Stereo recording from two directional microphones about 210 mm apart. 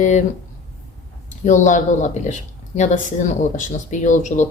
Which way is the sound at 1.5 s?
35° left (ahead or behind).